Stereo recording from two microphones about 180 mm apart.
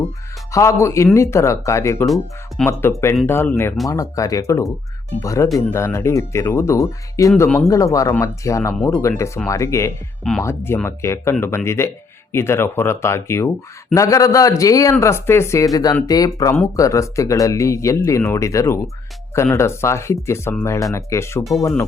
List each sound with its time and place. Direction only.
0.5 s a man's voice: 15° left (ahead or behind)